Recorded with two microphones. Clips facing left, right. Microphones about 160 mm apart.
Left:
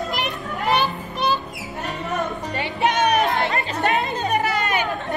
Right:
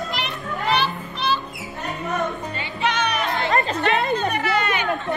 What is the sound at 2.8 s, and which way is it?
Music, 45° left (ahead or behind).